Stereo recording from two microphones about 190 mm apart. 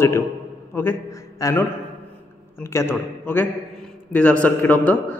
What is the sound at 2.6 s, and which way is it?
A man's voice, 15° left (ahead or behind).